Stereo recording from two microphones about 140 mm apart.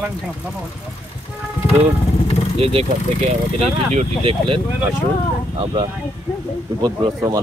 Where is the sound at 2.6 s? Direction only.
45° right (ahead or behind).